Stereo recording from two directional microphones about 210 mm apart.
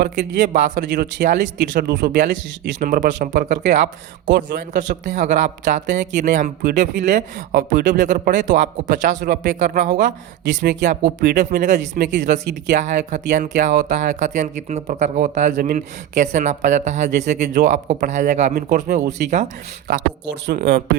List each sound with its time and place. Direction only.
0.0 s speech: 55° right (ahead or behind)
0.4 s speech: 40° right (ahead or behind)
0.8 s speech: 55° right (ahead or behind)
4.7 s speech: 35° right (ahead or behind)
10.4 s speech: 55° right (ahead or behind)
10.8 s speech: 40° right (ahead or behind)
19.9 s speech: 55° right (ahead or behind)